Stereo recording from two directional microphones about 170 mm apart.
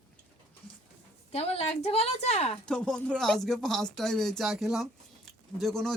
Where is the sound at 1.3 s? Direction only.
40° left (ahead or behind).